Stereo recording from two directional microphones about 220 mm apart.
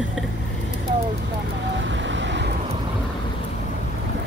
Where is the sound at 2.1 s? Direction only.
55° right (ahead or behind).